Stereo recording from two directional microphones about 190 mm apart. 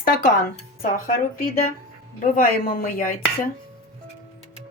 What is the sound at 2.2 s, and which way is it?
Speech, 45° left (ahead or behind).